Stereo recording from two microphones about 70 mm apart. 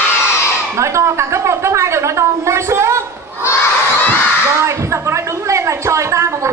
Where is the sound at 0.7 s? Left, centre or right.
Right.